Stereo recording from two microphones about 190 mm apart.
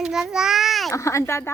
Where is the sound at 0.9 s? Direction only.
15° left (ahead or behind).